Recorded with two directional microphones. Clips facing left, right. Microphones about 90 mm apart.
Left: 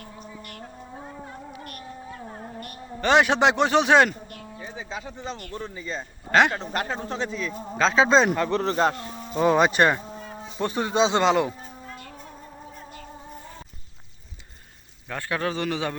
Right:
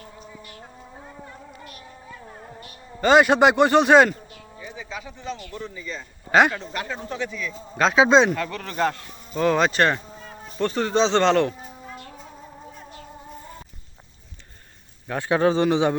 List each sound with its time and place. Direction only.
3.0 s a man's voice: 5° right (ahead or behind)
4.6 s bird: 35° left (ahead or behind)
5.5 s a man's voice: 30° left (ahead or behind)
7.8 s a man's voice: 5° right (ahead or behind)
8.3 s a man's voice: 25° left (ahead or behind)
9.3 s speech: 10° left (ahead or behind)
15.3 s a man's voice: 25° right (ahead or behind)